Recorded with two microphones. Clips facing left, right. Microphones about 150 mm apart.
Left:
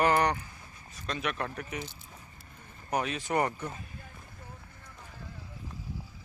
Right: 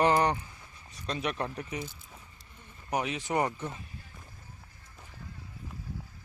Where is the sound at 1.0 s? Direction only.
35° right (ahead or behind).